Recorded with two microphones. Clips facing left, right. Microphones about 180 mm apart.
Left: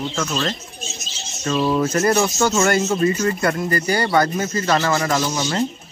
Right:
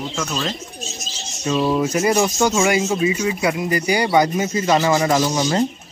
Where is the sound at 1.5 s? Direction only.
5° right (ahead or behind).